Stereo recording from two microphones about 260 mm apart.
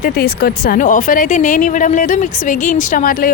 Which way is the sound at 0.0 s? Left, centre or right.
Left.